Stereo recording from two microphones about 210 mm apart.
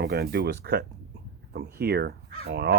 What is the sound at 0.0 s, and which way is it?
Speech, 50° right (ahead or behind).